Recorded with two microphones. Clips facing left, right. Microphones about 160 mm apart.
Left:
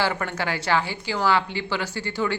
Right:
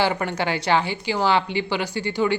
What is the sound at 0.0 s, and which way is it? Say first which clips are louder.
A woman's voice: right 3 dB; 20° right (ahead or behind).